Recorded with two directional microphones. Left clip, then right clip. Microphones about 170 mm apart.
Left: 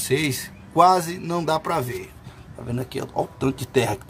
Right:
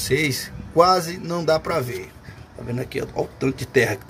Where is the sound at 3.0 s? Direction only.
35° left (ahead or behind).